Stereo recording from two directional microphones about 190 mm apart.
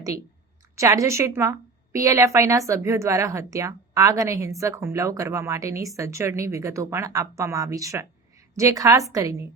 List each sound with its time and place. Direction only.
0.8 s a woman's voice: 15° right (ahead or behind)